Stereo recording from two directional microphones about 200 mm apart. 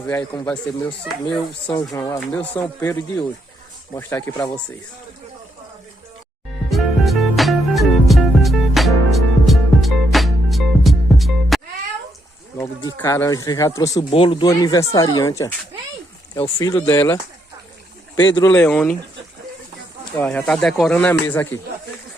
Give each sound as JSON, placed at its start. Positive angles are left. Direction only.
{"t": 0.1, "sound": "speech", "side_deg": 10}
{"t": 6.7, "sound": "music", "side_deg": 0}
{"t": 12.5, "sound": "speech", "side_deg": 15}
{"t": 14.1, "sound": "speech", "side_deg": 25}
{"t": 18.5, "sound": "speech", "side_deg": 5}
{"t": 20.1, "sound": "speech", "side_deg": 5}